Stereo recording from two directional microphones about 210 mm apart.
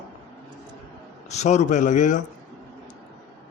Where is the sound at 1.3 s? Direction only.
30° left (ahead or behind).